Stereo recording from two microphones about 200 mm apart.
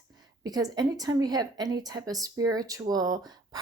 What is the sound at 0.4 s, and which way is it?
Speech, 20° right (ahead or behind).